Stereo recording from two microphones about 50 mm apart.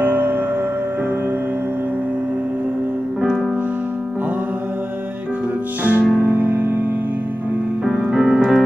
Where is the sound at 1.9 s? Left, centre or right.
Right.